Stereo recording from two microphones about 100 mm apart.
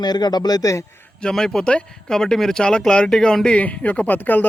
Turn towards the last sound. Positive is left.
turn(degrees=20)  # may be behind; listen again after turning